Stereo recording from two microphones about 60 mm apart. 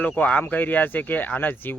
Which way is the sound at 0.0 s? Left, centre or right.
Left.